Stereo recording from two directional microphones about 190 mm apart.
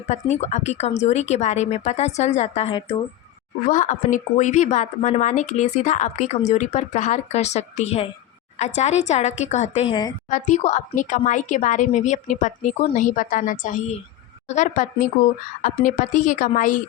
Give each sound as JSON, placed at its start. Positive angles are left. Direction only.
{"t": 0.1, "sound": "speech", "side_deg": 35}
{"t": 3.7, "sound": "speech", "side_deg": 40}
{"t": 10.2, "sound": "a woman's voice", "side_deg": 40}